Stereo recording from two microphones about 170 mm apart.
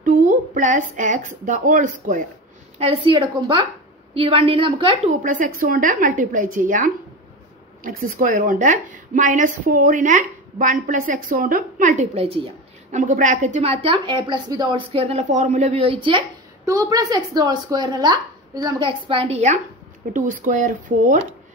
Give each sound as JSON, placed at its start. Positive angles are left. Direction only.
{"t": 0.0, "sound": "speech", "side_deg": -50}
{"t": 2.8, "sound": "a woman's voice", "side_deg": -30}
{"t": 5.2, "sound": "speech", "side_deg": -50}
{"t": 16.6, "sound": "speech", "side_deg": -20}
{"t": 20.1, "sound": "speech", "side_deg": -50}